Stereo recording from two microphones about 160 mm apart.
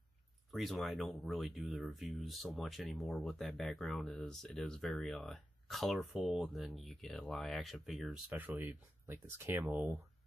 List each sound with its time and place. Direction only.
0.5 s speech: centre (ahead or behind)